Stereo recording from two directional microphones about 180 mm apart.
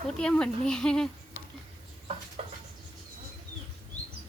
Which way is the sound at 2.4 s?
35° right (ahead or behind).